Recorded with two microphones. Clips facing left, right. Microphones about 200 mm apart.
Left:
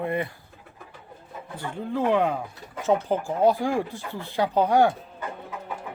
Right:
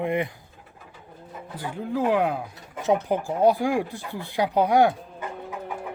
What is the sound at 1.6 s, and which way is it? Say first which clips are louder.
Speech: right 1 dB; 10° right (ahead or behind).